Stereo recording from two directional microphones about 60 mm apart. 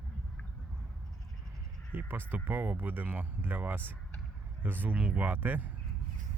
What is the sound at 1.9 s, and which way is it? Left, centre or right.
Speech, right.